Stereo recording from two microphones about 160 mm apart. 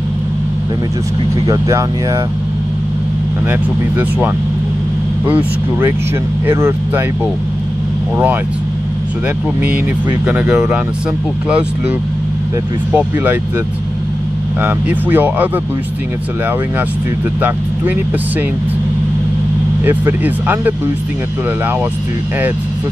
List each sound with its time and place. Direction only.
1.4 s speech: 20° right (ahead or behind)
5.2 s speech: 10° right (ahead or behind)
10.2 s speech: 10° right (ahead or behind)
12.9 s speech: 10° right (ahead or behind)
14.6 s speech: 10° right (ahead or behind)
19.8 s speech: 10° right (ahead or behind)